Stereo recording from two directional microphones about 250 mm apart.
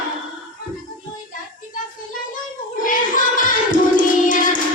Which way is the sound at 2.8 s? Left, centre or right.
Left.